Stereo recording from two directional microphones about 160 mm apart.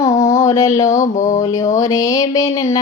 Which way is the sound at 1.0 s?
50° left (ahead or behind).